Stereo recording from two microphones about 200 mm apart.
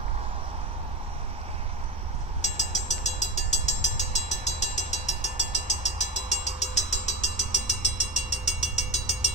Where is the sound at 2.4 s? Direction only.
35° left (ahead or behind).